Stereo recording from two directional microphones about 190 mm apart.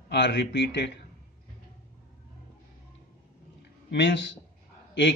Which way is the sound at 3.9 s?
70° left (ahead or behind).